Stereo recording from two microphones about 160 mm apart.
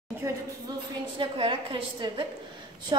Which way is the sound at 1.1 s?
30° right (ahead or behind).